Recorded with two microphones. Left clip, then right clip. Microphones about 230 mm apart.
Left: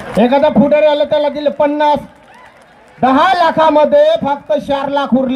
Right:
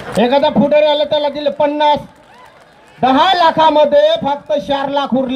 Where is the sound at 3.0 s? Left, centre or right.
Left.